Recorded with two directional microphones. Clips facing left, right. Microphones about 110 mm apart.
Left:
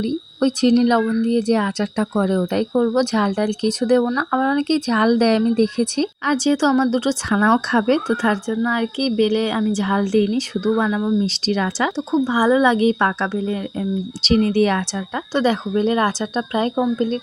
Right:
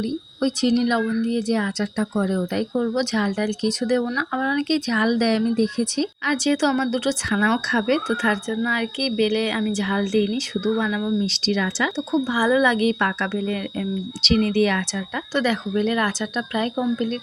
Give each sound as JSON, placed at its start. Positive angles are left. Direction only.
{"t": 0.0, "sound": "speech", "side_deg": 50}
{"t": 6.2, "sound": "speech", "side_deg": 30}
{"t": 11.9, "sound": "speech", "side_deg": 25}
{"t": 14.2, "sound": "speech", "side_deg": 35}